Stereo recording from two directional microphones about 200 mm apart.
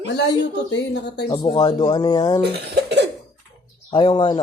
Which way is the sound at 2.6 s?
55° right (ahead or behind).